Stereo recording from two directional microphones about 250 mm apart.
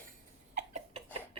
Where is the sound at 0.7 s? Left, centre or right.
Right.